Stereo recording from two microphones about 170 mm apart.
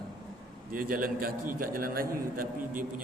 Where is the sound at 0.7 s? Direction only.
55° right (ahead or behind).